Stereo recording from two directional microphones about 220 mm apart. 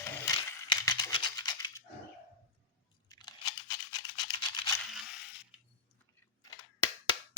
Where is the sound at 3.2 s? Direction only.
15° left (ahead or behind).